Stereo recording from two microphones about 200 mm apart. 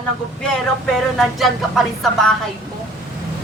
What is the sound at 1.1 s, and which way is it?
Speech, centre (ahead or behind).